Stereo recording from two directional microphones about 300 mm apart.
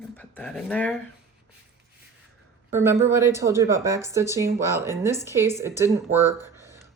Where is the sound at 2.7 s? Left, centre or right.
Centre.